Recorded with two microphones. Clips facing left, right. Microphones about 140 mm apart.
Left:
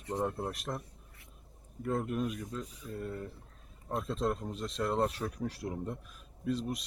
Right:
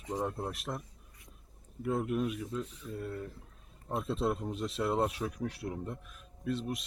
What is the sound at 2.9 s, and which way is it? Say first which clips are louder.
Speech: even; centre (ahead or behind).